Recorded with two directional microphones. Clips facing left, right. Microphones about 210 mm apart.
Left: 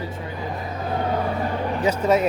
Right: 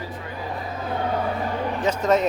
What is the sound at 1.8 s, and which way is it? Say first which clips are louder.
Speech: left 1 dB; 10° left (ahead or behind).